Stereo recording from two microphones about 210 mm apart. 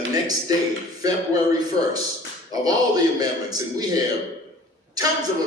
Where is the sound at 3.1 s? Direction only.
20° right (ahead or behind).